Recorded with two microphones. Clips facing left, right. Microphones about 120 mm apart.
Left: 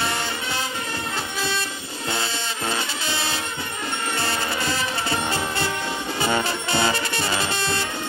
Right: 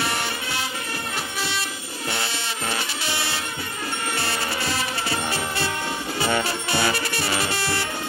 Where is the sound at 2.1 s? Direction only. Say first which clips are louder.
Left 2 dB; 25° left (ahead or behind).